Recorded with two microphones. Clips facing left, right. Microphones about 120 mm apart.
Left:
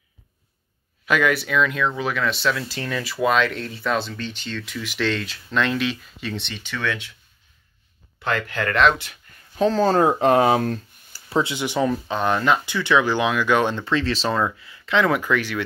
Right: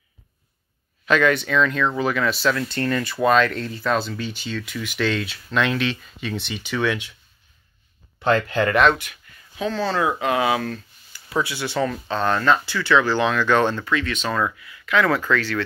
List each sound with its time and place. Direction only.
1.0 s speech: 10° left (ahead or behind); by 7.1 s 15° right (ahead or behind)
8.2 s speech: 30° right (ahead or behind)
9.6 s speech: 40° left (ahead or behind); by 13.8 s 10° left (ahead or behind)
13.8 s speech: 30° left (ahead or behind); by 15.6 s 15° left (ahead or behind)